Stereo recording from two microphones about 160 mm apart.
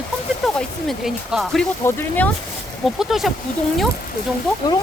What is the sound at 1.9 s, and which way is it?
Speech, 10° left (ahead or behind).